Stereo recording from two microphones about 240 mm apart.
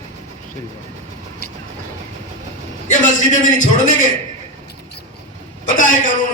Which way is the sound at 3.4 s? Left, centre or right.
Left.